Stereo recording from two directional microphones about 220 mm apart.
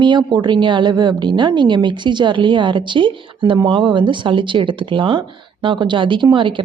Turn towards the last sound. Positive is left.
turn(degrees=-20)  # may be behind; listen again after turning